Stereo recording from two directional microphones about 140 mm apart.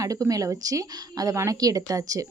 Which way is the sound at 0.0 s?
25° right (ahead or behind).